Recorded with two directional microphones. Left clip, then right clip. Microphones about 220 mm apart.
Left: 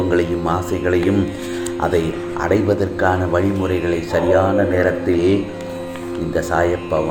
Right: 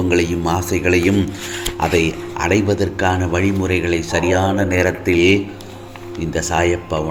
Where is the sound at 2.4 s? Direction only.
65° right (ahead or behind).